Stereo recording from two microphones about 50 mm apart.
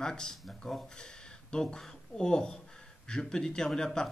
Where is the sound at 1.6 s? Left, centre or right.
Centre.